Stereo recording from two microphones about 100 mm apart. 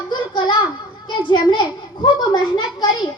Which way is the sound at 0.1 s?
50° left (ahead or behind).